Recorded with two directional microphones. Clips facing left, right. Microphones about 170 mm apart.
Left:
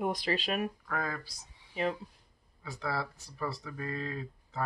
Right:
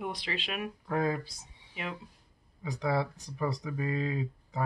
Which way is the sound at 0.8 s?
20° right (ahead or behind).